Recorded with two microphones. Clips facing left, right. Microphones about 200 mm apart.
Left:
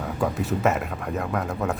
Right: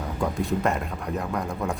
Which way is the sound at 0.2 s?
5° left (ahead or behind).